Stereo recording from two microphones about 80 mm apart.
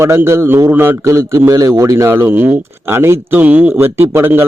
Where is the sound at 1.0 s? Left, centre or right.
Right.